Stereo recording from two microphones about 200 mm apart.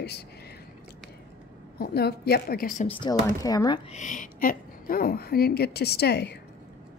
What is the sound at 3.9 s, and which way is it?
A woman's voice, 40° left (ahead or behind).